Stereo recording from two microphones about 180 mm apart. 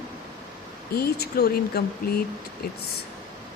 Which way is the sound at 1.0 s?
60° left (ahead or behind).